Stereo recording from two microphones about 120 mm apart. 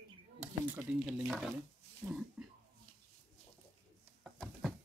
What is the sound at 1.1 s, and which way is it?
Speech, centre (ahead or behind).